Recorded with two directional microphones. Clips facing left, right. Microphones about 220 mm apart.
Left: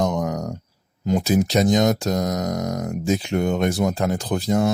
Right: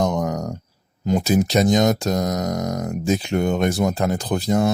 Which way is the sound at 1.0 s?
40° right (ahead or behind).